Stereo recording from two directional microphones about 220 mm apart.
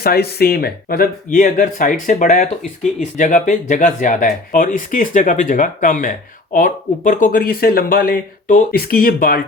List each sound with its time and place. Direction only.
0.0 s speech: 45° left (ahead or behind)